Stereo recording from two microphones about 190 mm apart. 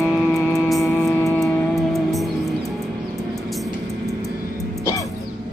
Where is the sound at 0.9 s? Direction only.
10° left (ahead or behind).